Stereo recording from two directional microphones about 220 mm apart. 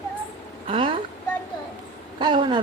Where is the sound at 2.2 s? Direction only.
20° right (ahead or behind).